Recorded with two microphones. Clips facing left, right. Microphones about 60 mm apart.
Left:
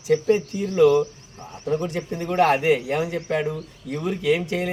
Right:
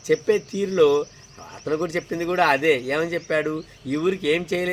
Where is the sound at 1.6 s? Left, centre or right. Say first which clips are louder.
Right 1 dB; right.